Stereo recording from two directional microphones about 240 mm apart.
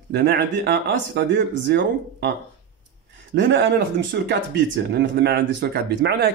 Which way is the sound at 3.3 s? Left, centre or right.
Right.